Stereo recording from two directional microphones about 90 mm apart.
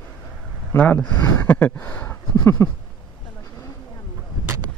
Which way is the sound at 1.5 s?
15° left (ahead or behind).